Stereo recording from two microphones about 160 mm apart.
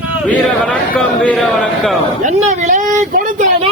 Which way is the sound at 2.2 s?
50° right (ahead or behind).